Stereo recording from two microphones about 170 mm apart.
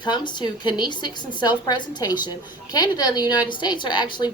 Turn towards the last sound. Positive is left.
turn(degrees=25)  # may be behind; listen again after turning